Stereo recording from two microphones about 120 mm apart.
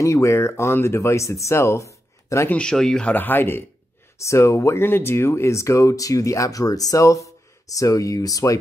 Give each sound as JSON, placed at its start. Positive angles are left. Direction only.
{"t": 0.0, "sound": "speech", "side_deg": 25}
{"t": 2.5, "sound": "speech", "side_deg": 5}